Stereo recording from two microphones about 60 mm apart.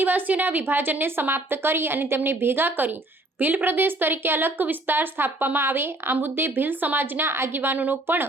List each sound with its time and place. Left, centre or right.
0.0 s a woman's voice: right